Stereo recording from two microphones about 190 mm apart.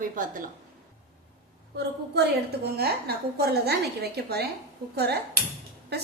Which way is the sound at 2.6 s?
55° right (ahead or behind).